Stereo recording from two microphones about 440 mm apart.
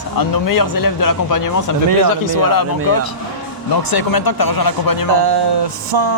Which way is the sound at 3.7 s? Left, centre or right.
Left.